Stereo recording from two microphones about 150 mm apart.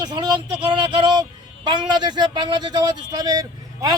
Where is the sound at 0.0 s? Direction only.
30° right (ahead or behind).